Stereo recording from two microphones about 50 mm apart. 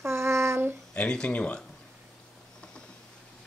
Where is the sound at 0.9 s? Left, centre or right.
Left.